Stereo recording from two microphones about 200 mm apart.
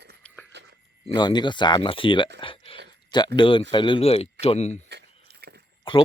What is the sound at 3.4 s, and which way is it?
Speech, 25° left (ahead or behind).